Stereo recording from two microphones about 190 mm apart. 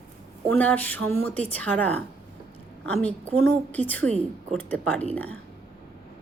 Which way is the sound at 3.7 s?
10° left (ahead or behind).